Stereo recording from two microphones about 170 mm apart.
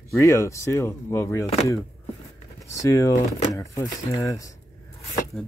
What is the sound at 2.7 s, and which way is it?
Speech, 20° left (ahead or behind).